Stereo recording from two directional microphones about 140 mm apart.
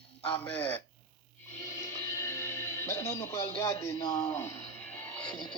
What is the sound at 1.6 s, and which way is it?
Music, 20° left (ahead or behind).